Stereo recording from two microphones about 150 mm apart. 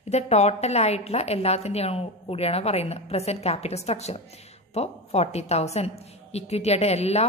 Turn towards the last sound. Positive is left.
turn(degrees=45)  # may be behind; listen again after turning